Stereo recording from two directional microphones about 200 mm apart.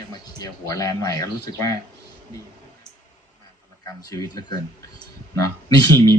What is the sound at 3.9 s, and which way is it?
A man's voice, 15° left (ahead or behind).